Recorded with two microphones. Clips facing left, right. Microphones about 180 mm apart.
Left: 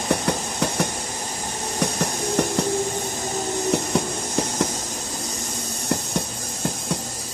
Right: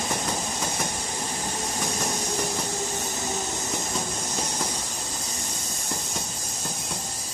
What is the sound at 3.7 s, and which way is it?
Train, 70° left (ahead or behind).